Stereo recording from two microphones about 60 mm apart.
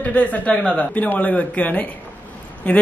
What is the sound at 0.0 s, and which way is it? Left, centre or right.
Speech, left.